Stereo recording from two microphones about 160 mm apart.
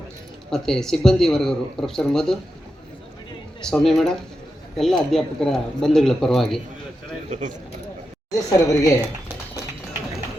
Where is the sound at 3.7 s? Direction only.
Centre (ahead or behind).